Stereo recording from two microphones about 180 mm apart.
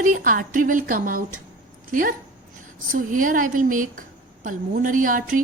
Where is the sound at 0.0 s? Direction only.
50° right (ahead or behind).